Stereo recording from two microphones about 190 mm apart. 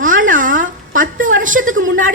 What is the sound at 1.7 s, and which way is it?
Speech, 90° right.